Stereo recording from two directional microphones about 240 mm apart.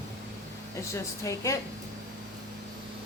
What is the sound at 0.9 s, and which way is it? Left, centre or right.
Speech, centre.